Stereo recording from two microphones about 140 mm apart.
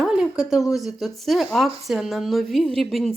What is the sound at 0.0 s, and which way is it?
Speech, 5° right (ahead or behind).